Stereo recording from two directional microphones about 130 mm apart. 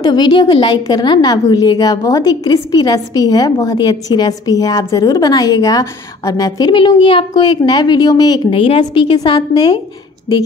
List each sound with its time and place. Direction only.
0.0 s a woman's voice: 35° left (ahead or behind)